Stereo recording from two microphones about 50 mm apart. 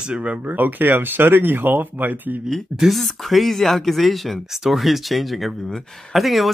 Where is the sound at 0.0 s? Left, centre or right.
Right.